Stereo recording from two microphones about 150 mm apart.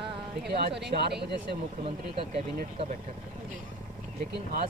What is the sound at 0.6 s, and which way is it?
Speech, 90° right.